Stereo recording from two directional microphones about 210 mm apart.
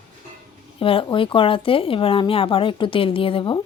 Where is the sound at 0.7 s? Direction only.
25° left (ahead or behind).